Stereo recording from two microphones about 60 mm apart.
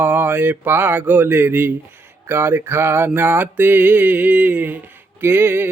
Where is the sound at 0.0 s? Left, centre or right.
Right.